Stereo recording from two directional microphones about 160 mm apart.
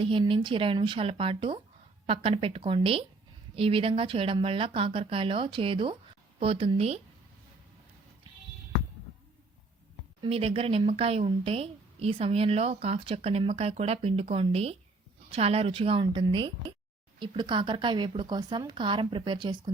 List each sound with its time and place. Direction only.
0.0 s a woman's voice: 35° right (ahead or behind)
10.2 s a woman's voice: 35° right (ahead or behind)